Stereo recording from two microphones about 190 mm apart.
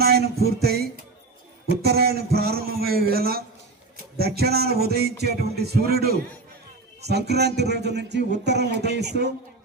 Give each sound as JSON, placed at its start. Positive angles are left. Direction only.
{"t": 0.0, "sound": "music", "side_deg": -55}
{"t": 1.8, "sound": "speech", "side_deg": -55}
{"t": 3.9, "sound": "music", "side_deg": -55}
{"t": 5.2, "sound": "speech", "side_deg": -60}